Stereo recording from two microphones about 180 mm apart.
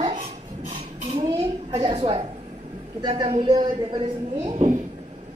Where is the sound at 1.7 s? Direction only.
30° right (ahead or behind).